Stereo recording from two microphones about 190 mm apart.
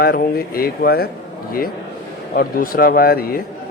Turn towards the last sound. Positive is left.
turn(degrees=50)  # may be behind; listen again after turning